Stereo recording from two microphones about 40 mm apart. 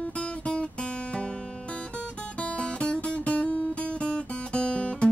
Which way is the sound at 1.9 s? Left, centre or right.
Left.